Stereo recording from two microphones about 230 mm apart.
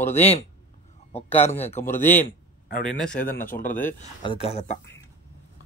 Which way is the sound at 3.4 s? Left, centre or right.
Left.